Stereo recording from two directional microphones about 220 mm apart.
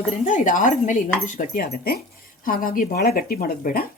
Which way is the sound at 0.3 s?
35° left (ahead or behind).